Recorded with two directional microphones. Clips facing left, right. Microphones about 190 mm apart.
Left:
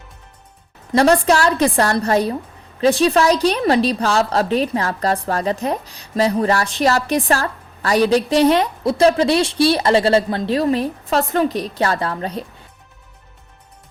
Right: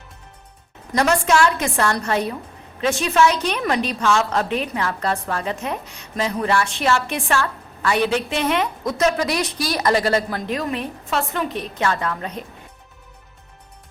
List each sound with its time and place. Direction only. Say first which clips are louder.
0.9 s a woman's voice: left 4 dB; 35° left (ahead or behind)